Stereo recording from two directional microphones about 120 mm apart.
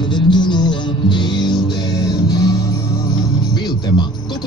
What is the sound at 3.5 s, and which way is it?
Music, 35° left (ahead or behind).